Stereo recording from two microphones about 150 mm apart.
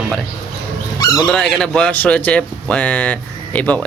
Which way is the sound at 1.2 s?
5° left (ahead or behind).